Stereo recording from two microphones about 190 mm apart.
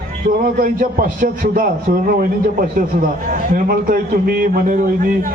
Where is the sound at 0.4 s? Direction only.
50° right (ahead or behind).